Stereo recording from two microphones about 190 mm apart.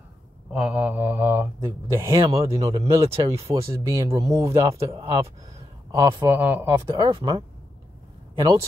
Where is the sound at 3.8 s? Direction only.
15° right (ahead or behind).